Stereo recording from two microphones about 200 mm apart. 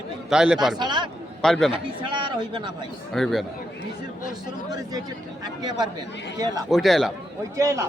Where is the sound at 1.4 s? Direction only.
Centre (ahead or behind).